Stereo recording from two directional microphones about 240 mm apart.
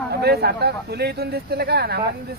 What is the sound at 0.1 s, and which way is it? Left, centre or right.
Speech, right.